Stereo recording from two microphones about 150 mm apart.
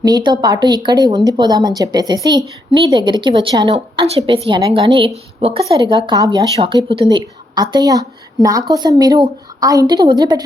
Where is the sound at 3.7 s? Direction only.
45° right (ahead or behind).